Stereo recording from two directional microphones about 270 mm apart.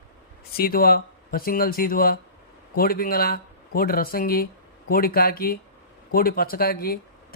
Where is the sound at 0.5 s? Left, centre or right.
Left.